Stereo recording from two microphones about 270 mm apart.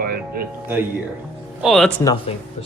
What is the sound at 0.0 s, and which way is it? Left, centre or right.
Doorbell, right.